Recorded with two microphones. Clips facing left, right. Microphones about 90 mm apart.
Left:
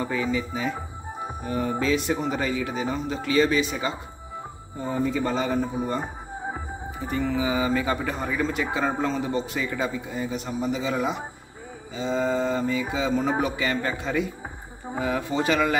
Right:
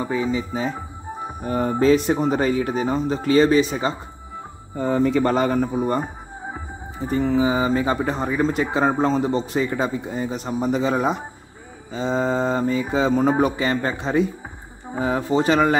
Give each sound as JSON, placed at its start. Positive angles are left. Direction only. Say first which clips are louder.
{"t": 0.0, "sound": "speech", "louder": "right 3 dB", "side_deg": -20}
{"t": 4.7, "sound": "speech", "louder": "right 7 dB", "side_deg": -70}
{"t": 7.0, "sound": "speech", "louder": "right 6 dB", "side_deg": -30}